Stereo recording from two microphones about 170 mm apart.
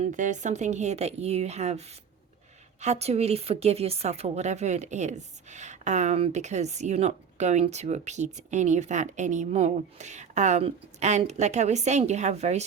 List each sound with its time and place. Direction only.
0.0 s speech: 45° right (ahead or behind)
2.8 s speech: 40° right (ahead or behind)